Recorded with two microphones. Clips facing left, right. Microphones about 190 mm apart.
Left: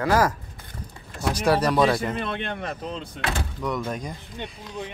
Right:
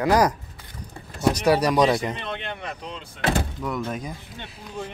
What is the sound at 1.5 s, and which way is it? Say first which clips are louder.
Speech: even; 10° right (ahead or behind).